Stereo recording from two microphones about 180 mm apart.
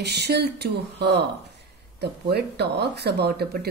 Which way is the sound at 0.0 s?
65° right (ahead or behind).